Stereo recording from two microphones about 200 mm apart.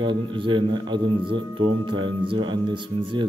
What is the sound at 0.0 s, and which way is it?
A man's voice, 25° right (ahead or behind).